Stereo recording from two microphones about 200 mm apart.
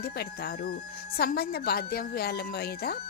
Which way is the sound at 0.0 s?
50° left (ahead or behind).